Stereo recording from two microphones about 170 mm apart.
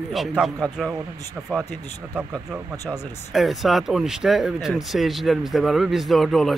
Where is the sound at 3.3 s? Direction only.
Centre (ahead or behind).